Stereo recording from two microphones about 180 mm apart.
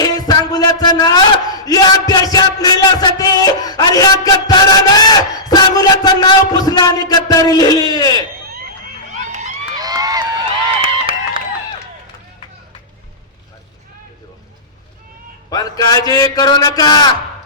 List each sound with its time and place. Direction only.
0.0 s a man's voice: 20° left (ahead or behind)
9.1 s run: 40° right (ahead or behind)
9.7 s a sound: 20° right (ahead or behind)
15.4 s a man's voice: 20° left (ahead or behind)